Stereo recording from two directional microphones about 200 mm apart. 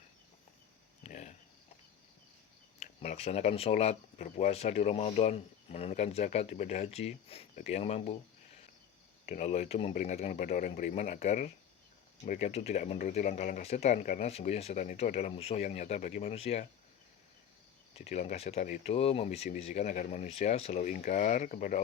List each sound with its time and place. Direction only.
1.0 s a sound: 35° left (ahead or behind)
2.7 s speech: 35° left (ahead or behind)
9.2 s speech: 35° left (ahead or behind)
17.9 s speech: 35° left (ahead or behind)